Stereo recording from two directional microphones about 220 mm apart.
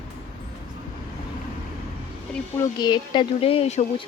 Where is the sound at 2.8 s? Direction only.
20° left (ahead or behind).